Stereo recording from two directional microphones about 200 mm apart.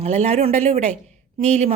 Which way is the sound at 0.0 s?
35° right (ahead or behind).